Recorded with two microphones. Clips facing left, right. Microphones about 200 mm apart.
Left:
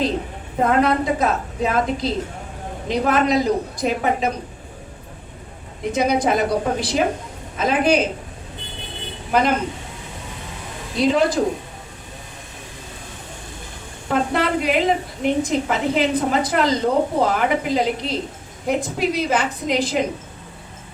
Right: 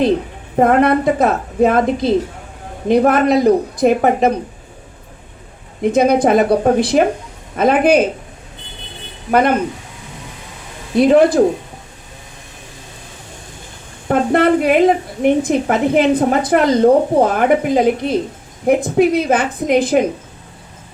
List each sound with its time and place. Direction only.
0.5 s a woman's voice: 55° right (ahead or behind)
5.8 s a woman's voice: 55° right (ahead or behind)
9.3 s a woman's voice: 60° right (ahead or behind)
10.9 s a woman's voice: 55° right (ahead or behind)
14.1 s a woman's voice: 55° right (ahead or behind)